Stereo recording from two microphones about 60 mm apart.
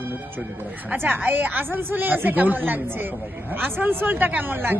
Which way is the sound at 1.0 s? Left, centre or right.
Right.